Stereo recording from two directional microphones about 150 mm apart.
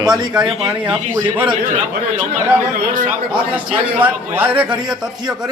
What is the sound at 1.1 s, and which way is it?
Speech, 15° right (ahead or behind).